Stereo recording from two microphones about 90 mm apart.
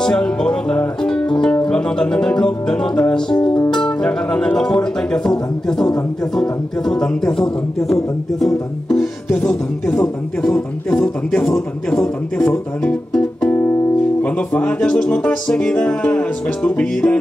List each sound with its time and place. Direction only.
0.0 s music: 10° left (ahead or behind)
7.9 s speech: 5° left (ahead or behind)
9.3 s music: 15° left (ahead or behind)
12.4 s guitar: 20° left (ahead or behind)
14.2 s music: 15° left (ahead or behind)